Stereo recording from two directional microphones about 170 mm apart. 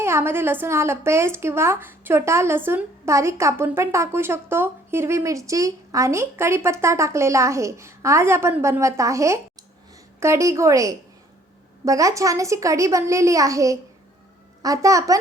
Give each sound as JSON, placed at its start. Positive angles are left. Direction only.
{"t": 0.0, "sound": "a woman's voice", "side_deg": -15}